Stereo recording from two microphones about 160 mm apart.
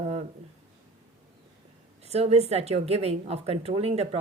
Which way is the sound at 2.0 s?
40° right (ahead or behind).